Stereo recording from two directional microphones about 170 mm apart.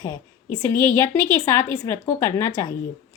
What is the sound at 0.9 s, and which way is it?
A woman's voice, 15° left (ahead or behind).